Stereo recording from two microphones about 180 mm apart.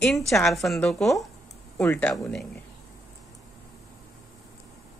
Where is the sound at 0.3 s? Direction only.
Centre (ahead or behind).